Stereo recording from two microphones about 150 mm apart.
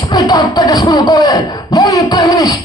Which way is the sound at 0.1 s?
25° left (ahead or behind).